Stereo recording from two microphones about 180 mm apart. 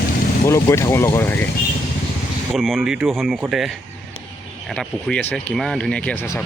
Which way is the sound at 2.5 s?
Centre (ahead or behind).